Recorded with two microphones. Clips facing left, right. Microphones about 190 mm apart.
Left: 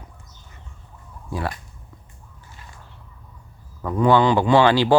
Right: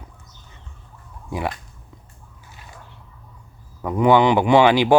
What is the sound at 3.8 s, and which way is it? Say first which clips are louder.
Speech: right 1 dB; 15° right (ahead or behind).